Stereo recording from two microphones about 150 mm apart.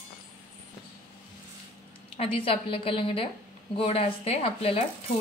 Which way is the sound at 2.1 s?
40° left (ahead or behind).